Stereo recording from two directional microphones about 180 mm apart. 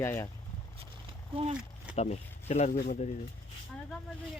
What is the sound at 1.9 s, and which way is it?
Speech, 40° left (ahead or behind).